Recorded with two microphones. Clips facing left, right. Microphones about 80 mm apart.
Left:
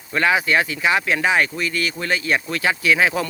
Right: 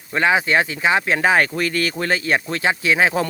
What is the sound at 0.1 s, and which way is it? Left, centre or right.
Speech, right.